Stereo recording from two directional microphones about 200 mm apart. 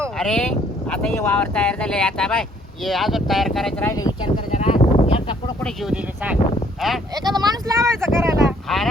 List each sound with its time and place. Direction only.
0.2 s speech: 5° left (ahead or behind)
4.5 s a sound: 30° left (ahead or behind)
5.6 s speech: 5° right (ahead or behind)
7.3 s speech: 20° right (ahead or behind)